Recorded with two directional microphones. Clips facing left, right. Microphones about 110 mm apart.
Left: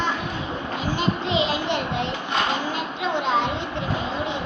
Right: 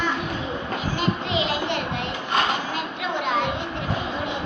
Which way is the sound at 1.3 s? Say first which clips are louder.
Left 2 dB; 20° left (ahead or behind).